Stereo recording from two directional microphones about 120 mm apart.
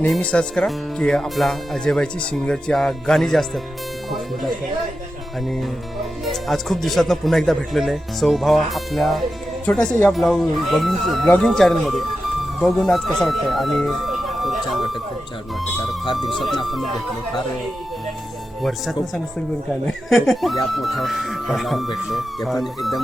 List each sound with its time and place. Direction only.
0.1 s speech: 10° left (ahead or behind)
6.2 s speech: centre (ahead or behind)
9.6 s speech: 10° left (ahead or behind)
10.1 s speech: centre (ahead or behind)
16.1 s speech: centre (ahead or behind)
18.6 s speech: centre (ahead or behind)